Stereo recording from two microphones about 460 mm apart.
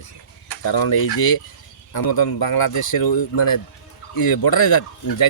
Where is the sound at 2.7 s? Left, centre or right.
Left.